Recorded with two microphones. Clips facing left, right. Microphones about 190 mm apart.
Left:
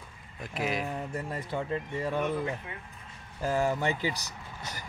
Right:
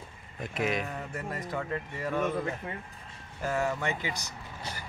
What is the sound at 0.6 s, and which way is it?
Speech, centre (ahead or behind).